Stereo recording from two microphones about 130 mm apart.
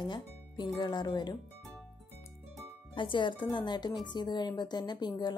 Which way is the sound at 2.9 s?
40° left (ahead or behind).